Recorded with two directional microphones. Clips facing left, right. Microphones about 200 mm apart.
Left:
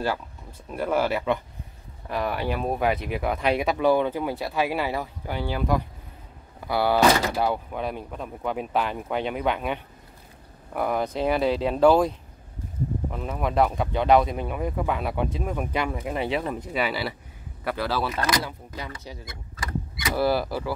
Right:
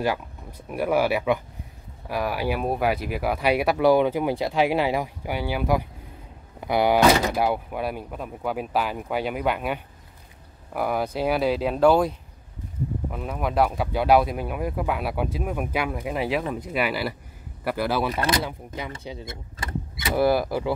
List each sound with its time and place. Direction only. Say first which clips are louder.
0.7 s speech: right 2 dB; 10° right (ahead or behind)